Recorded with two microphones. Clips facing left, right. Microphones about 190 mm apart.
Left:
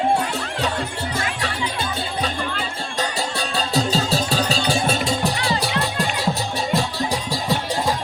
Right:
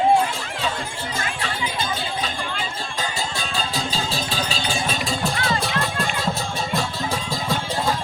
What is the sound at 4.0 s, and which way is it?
Music, 40° left (ahead or behind).